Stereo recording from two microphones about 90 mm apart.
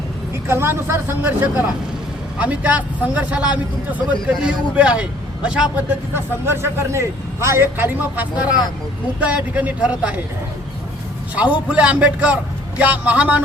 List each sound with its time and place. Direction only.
0.4 s a man's voice: 30° right (ahead or behind); by 5.6 s 10° right (ahead or behind)
5.7 s a man's voice: 25° right (ahead or behind)
11.3 s a man's voice: 15° right (ahead or behind)